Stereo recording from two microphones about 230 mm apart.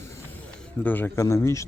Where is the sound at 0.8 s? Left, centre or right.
Centre.